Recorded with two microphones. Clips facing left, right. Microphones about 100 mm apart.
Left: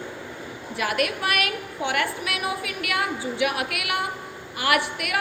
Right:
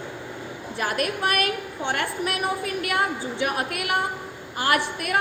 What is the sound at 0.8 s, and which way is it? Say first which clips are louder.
A woman's voice: even; 35° right (ahead or behind).